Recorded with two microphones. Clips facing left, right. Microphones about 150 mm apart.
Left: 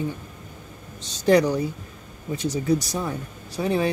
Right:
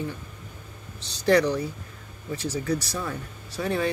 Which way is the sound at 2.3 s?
20° left (ahead or behind).